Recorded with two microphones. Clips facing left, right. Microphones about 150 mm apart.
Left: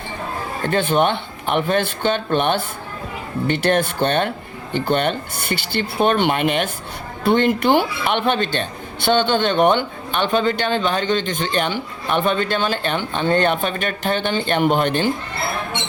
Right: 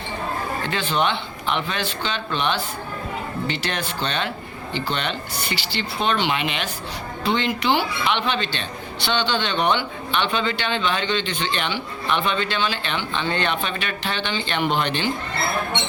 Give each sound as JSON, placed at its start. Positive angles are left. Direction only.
{"t": 0.6, "sound": "a man's voice", "side_deg": 50}